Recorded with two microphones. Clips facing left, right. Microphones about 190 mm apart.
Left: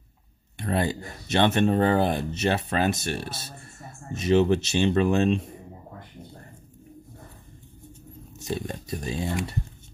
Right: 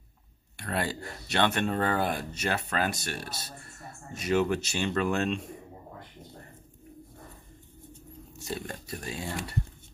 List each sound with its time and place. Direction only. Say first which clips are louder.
0.6 s speech: left 5 dB; 20° left (ahead or behind)
8.4 s speech: left 5 dB; 20° left (ahead or behind)